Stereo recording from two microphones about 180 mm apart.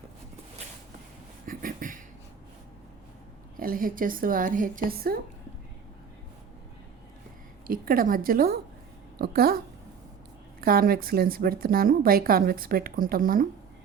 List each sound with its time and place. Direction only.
1.5 s a sound: 50° right (ahead or behind)
3.6 s a woman's voice: 50° right (ahead or behind)
7.7 s a woman's voice: 55° right (ahead or behind)
10.6 s a woman's voice: 55° right (ahead or behind)